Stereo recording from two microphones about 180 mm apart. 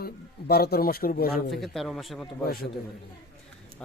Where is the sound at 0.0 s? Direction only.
60° left (ahead or behind).